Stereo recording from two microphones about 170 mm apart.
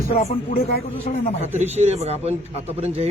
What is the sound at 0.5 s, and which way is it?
Speech, 60° left (ahead or behind).